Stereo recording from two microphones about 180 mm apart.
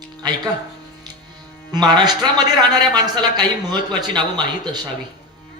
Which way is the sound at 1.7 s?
20° right (ahead or behind).